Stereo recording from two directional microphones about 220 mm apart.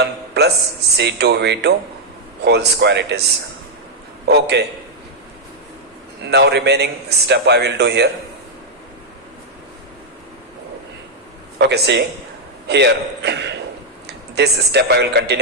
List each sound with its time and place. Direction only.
0.0 s a man's voice: 50° right (ahead or behind)
4.3 s a man's voice: 50° right (ahead or behind)
6.2 s a man's voice: 50° right (ahead or behind)
11.5 s a man's voice: 50° right (ahead or behind)